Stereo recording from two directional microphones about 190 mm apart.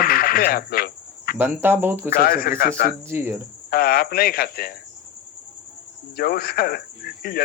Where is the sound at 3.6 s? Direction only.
50° left (ahead or behind).